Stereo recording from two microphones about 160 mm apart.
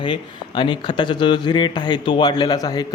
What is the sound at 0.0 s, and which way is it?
A man's voice, 30° left (ahead or behind).